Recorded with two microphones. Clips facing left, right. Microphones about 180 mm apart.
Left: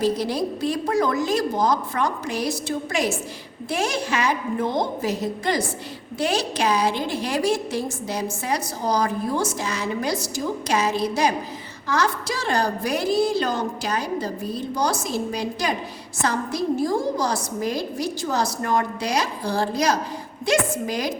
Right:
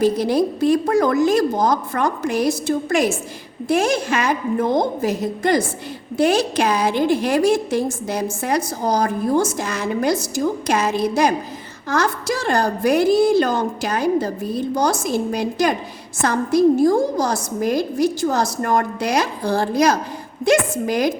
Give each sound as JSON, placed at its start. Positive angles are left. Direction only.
{"t": 0.0, "sound": "a woman's voice", "side_deg": -55}